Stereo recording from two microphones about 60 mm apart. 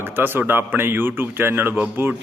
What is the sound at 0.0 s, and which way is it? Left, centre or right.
Speech, right.